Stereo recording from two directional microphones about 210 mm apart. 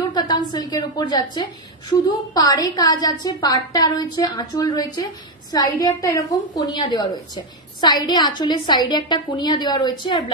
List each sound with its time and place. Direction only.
0.1 s a woman's voice: 20° left (ahead or behind)